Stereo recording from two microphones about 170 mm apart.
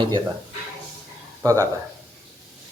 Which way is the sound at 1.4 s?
20° right (ahead or behind).